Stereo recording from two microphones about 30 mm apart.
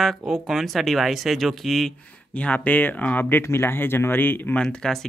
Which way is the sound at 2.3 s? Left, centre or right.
Left.